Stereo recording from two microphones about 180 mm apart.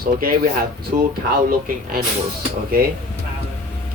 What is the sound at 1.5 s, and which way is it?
Speech, 55° right (ahead or behind).